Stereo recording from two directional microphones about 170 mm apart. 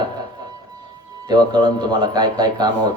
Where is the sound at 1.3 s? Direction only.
25° right (ahead or behind).